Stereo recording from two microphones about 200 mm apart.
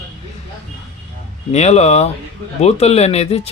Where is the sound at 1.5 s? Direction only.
35° left (ahead or behind).